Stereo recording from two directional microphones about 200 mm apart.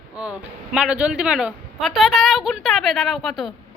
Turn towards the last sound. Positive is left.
turn(degrees=0)  # may be behind; listen again after turning